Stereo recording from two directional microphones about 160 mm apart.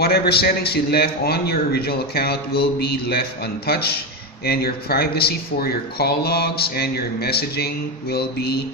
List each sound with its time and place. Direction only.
0.0 s speech: 85° left